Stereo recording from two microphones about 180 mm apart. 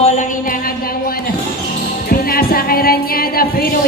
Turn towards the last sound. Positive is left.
turn(degrees=55)  # may be behind; listen again after turning